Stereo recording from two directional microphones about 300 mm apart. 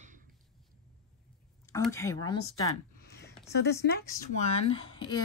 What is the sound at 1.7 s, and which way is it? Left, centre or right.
Speech, centre.